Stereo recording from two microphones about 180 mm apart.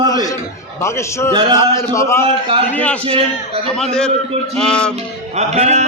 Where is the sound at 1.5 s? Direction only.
15° left (ahead or behind).